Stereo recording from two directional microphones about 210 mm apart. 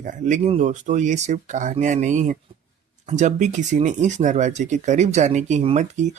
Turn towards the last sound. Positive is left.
turn(degrees=-35)  # may be behind; listen again after turning